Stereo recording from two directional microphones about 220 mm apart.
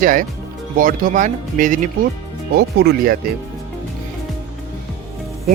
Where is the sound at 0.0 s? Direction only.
40° right (ahead or behind).